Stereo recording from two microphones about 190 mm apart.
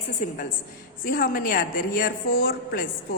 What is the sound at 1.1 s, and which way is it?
A woman's voice, 50° left (ahead or behind).